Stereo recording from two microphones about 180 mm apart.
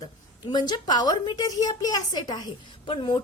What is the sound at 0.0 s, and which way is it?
A woman's voice, 25° left (ahead or behind).